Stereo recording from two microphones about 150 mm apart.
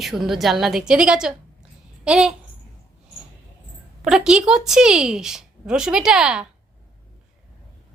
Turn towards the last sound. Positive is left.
turn(degrees=-5)  # may be behind; listen again after turning